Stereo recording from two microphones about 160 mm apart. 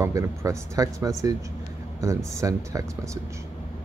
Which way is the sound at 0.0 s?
20° right (ahead or behind).